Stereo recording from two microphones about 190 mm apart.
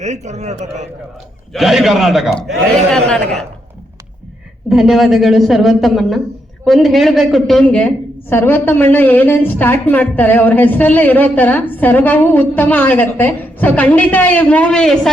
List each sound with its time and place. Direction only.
0.0 s a man's voice: 35° right (ahead or behind)
1.5 s a woman's voice: centre (ahead or behind)
4.7 s a woman's voice: centre (ahead or behind)